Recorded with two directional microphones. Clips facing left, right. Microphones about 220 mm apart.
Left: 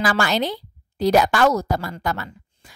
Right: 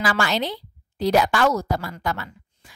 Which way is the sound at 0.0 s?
45° left (ahead or behind).